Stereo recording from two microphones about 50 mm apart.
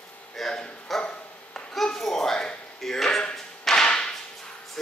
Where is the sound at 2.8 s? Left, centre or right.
Centre.